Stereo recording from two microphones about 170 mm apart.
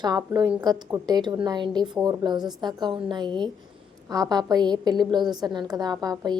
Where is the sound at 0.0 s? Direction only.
20° right (ahead or behind).